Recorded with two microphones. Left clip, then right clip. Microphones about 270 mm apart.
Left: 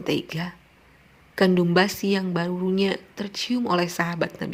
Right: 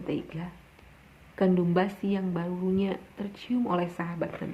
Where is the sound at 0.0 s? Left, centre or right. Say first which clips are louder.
Left 8 dB; left.